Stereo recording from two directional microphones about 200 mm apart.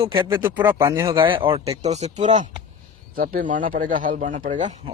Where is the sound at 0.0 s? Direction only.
25° right (ahead or behind).